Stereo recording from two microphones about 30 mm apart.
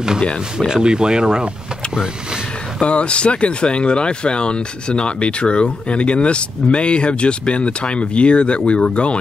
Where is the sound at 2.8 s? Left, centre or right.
Left.